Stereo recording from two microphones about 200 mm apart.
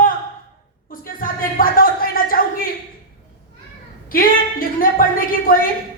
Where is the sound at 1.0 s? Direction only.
45° left (ahead or behind).